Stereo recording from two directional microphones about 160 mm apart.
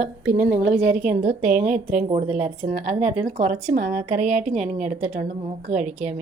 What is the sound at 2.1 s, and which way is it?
A woman's voice, 40° right (ahead or behind).